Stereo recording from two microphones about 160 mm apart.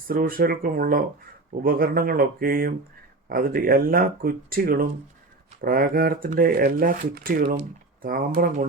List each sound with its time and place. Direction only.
0.1 s speech: 65° right (ahead or behind)